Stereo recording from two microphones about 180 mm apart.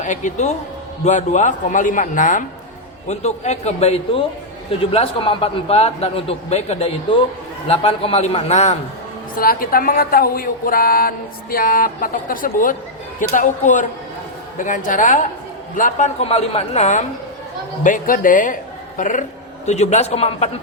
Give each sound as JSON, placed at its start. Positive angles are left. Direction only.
{"t": 0.0, "sound": "a woman's voice", "side_deg": 45}
{"t": 9.3, "sound": "a woman's voice", "side_deg": 55}